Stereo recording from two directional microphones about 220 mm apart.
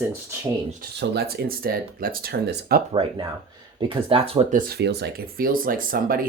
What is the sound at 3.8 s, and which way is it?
Speech, 20° right (ahead or behind).